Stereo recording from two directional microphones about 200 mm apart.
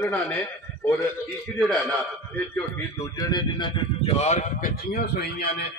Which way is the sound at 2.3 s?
10° left (ahead or behind).